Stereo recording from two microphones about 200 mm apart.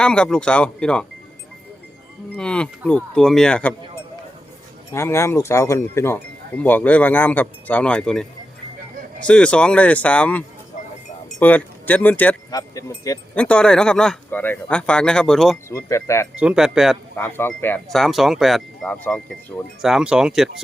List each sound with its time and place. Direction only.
0.0 s speech: 5° left (ahead or behind)
2.3 s speech: 5° left (ahead or behind)
13.3 s speech: 5° left (ahead or behind)
15.7 s speech: 15° left (ahead or behind)
16.4 s speech: 5° right (ahead or behind)
17.2 s speech: 10° left (ahead or behind)